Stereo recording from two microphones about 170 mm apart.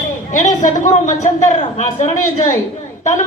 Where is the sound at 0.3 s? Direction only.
50° left (ahead or behind).